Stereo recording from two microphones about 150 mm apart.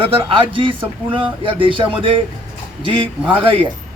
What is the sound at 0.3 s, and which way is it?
Speech, 35° right (ahead or behind).